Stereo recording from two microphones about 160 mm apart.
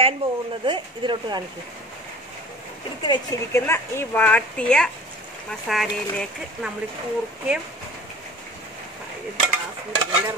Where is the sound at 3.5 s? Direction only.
15° left (ahead or behind); by 6.6 s centre (ahead or behind).